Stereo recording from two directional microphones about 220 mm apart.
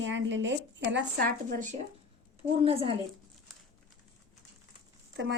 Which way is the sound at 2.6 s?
25° right (ahead or behind).